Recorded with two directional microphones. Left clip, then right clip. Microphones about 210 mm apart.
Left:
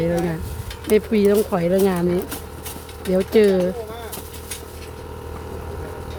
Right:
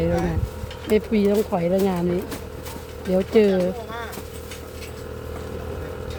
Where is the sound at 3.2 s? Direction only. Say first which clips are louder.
Left 2 dB; 20° left (ahead or behind).